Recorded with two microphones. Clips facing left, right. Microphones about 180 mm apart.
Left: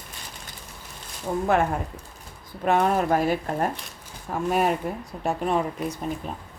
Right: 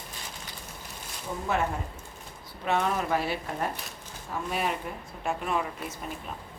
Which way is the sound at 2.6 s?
50° left (ahead or behind).